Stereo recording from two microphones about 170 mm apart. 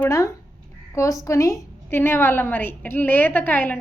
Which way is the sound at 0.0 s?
15° left (ahead or behind).